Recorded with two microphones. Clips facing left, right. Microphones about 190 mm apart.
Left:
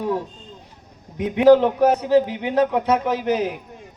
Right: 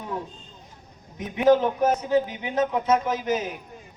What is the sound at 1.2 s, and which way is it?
A man's voice, 70° left (ahead or behind).